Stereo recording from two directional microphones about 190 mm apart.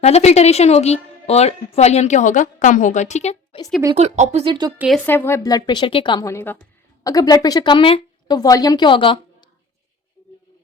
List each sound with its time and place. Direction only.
0.0 s speech: 35° left (ahead or behind)
3.9 s speech: 35° right (ahead or behind)
4.8 s speech: centre (ahead or behind)
5.0 s a woman's voice: 10° left (ahead or behind)